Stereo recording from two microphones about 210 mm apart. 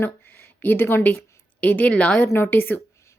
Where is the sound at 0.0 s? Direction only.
10° left (ahead or behind).